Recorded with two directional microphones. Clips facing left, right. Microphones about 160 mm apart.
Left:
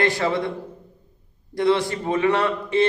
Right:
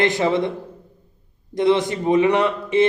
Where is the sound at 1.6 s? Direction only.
20° right (ahead or behind).